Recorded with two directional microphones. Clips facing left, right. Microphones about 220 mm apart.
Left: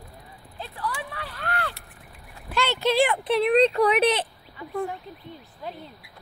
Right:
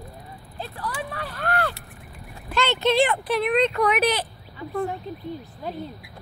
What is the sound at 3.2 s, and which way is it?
Speech, 30° left (ahead or behind).